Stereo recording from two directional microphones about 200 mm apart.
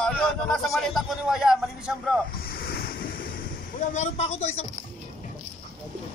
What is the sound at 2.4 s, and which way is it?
Waves, 50° left (ahead or behind).